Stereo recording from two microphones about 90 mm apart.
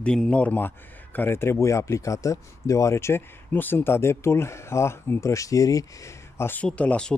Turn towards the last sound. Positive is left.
turn(degrees=15)  # may be behind; listen again after turning